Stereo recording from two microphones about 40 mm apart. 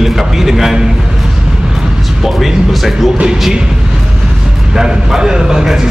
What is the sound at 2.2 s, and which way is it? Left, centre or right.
Speech, centre.